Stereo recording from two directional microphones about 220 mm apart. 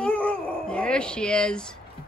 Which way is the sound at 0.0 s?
5° left (ahead or behind).